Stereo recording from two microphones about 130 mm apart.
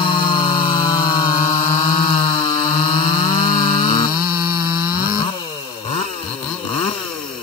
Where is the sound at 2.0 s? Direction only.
35° left (ahead or behind).